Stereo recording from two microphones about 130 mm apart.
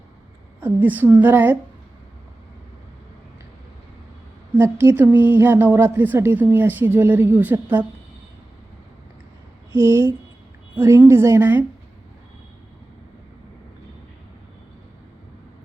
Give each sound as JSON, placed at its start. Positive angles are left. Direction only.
{"t": 0.6, "sound": "a woman's voice", "side_deg": -15}
{"t": 4.5, "sound": "a woman's voice", "side_deg": -20}
{"t": 9.7, "sound": "a woman's voice", "side_deg": -20}